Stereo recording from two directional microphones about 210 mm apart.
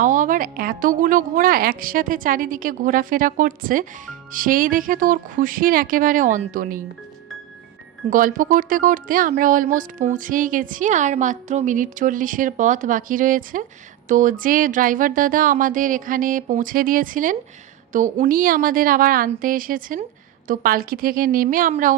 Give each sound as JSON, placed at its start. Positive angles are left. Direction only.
{"t": 0.0, "sound": "a woman's voice", "side_deg": -40}
{"t": 8.1, "sound": "a woman's voice", "side_deg": -40}